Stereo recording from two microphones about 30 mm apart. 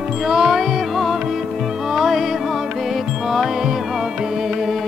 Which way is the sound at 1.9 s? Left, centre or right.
Centre.